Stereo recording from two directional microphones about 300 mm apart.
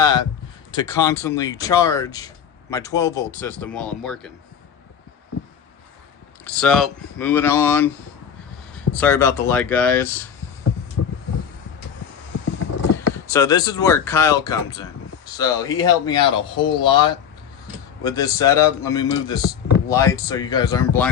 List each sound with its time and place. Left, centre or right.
0.0 s a man's voice: centre
6.4 s speech: centre
11.0 s vehicle: left
13.1 s speech: centre